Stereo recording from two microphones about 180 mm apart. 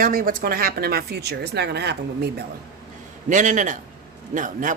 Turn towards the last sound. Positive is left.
turn(degrees=-45)  # may be behind; listen again after turning